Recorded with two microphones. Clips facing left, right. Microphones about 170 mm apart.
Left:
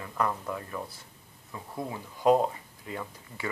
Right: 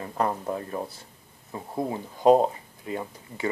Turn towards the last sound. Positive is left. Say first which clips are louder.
# right 5 dB
turn(degrees=-25)  # may be behind; listen again after turning